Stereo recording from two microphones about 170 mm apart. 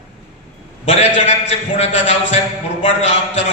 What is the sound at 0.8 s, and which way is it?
A man's voice, 40° left (ahead or behind).